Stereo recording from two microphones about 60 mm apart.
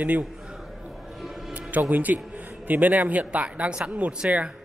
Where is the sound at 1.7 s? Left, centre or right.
Right.